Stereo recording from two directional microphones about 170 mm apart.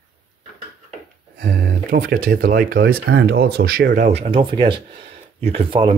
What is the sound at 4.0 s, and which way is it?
Speech, 40° right (ahead or behind).